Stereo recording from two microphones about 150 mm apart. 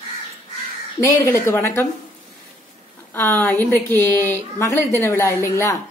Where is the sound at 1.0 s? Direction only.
20° left (ahead or behind).